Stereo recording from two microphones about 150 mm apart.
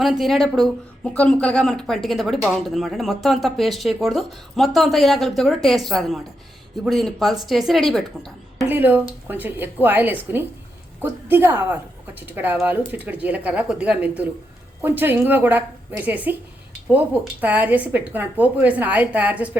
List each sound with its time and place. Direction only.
0.0 s speech: centre (ahead or behind)
8.7 s a woman's voice: 10° right (ahead or behind)